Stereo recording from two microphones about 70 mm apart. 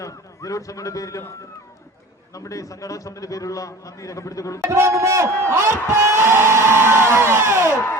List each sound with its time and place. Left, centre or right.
0.0 s a man's voice: left
2.3 s a man's voice: left
4.6 s a man's voice: right